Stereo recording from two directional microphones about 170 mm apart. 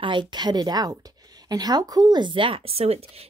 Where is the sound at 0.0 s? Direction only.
30° right (ahead or behind).